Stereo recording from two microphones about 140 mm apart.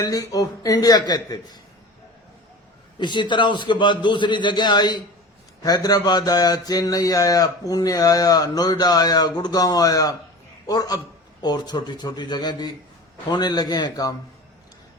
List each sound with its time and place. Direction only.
0.0 s speech: 25° left (ahead or behind)
3.0 s a man's voice: 35° left (ahead or behind)